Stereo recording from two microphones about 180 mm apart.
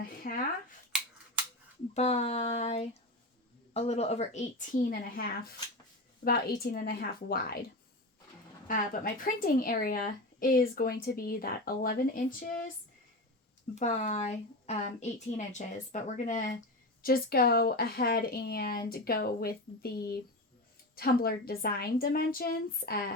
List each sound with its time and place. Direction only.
0.0 s speech: 55° left (ahead or behind)
1.9 s speech: 35° left (ahead or behind)
4.9 s speech: 55° left (ahead or behind)
8.6 s speech: 50° left (ahead or behind)
13.7 s speech: 40° left (ahead or behind)
17.0 s speech: 55° left (ahead or behind)